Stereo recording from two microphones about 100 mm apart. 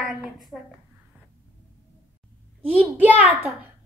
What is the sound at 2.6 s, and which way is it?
Speech, 15° right (ahead or behind).